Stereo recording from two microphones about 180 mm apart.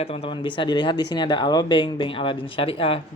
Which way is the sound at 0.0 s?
30° left (ahead or behind).